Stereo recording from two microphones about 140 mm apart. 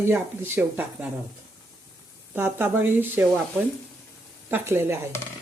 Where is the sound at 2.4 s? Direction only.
15° right (ahead or behind).